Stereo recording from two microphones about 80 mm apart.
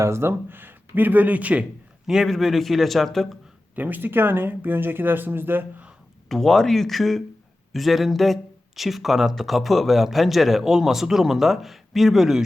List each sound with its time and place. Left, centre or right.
0.0 s speech: right; by 1.6 s centre
2.0 s speech: centre
3.8 s speech: right
6.2 s speech: centre